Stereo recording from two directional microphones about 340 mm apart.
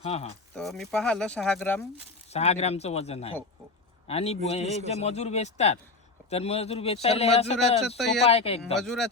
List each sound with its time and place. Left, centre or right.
0.0 s a man's voice: centre
0.5 s speech: centre
2.3 s a man's voice: centre
7.9 s speech: centre
8.2 s a man's voice: centre
8.8 s speech: centre